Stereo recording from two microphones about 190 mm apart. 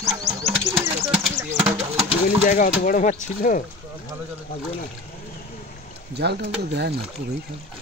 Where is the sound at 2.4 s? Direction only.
45° left (ahead or behind).